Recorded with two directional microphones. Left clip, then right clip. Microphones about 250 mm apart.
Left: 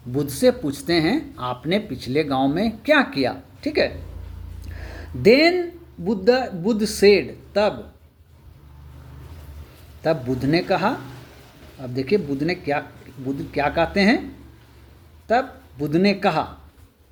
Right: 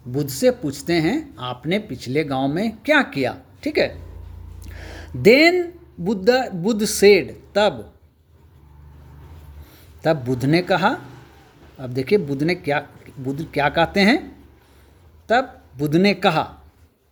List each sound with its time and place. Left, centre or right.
0.1 s speech: right
4.7 s a sound: right
6.1 s a man's voice: right
10.0 s a man's voice: right
15.3 s speech: right